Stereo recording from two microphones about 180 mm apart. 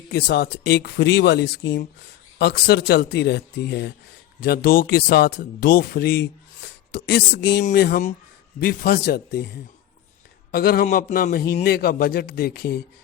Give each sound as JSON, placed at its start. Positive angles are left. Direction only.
{"t": 0.1, "sound": "speech", "side_deg": 65}
{"t": 7.6, "sound": "speech", "side_deg": 55}
{"t": 10.5, "sound": "speech", "side_deg": 55}